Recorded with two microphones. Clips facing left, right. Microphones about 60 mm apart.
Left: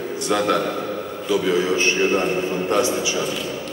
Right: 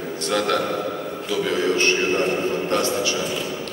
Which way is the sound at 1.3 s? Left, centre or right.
Centre.